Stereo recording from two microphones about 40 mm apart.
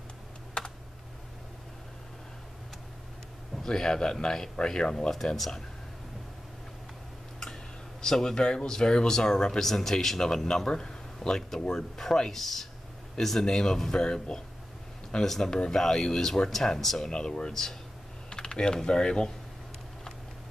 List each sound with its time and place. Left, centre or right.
0.6 s computer keyboard: left
3.6 s speech: centre
5.1 s speech: centre
8.0 s speech: centre